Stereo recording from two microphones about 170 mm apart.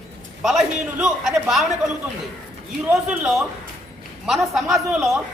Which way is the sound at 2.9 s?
5° right (ahead or behind).